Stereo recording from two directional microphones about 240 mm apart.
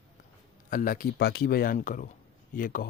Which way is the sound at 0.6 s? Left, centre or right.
Left.